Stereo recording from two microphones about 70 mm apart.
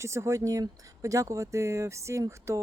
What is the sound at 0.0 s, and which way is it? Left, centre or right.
Speech, right.